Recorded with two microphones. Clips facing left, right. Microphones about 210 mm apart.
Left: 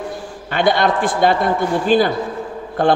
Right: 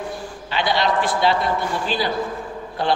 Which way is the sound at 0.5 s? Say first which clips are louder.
Left 5 dB; 50° left (ahead or behind).